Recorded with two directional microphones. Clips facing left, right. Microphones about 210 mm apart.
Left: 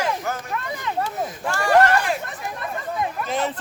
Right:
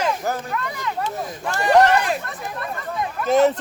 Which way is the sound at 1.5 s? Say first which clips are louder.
Right 3 dB; 20° right (ahead or behind).